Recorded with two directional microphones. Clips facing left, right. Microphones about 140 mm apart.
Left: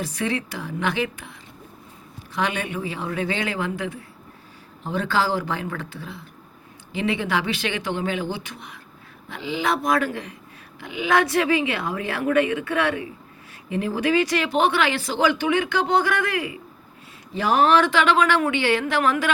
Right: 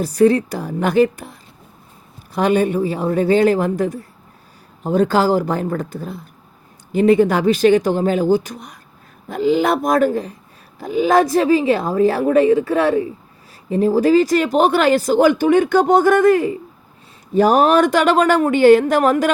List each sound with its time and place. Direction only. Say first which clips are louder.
0.0 s a woman's voice: right 12 dB; 40° right (ahead or behind)